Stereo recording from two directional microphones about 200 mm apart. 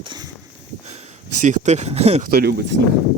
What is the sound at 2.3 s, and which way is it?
Speech, 50° right (ahead or behind).